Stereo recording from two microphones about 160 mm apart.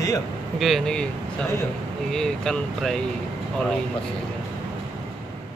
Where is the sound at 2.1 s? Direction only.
5° left (ahead or behind).